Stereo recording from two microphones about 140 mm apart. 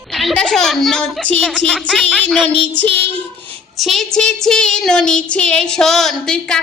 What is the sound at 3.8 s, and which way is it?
Child singing, centre (ahead or behind).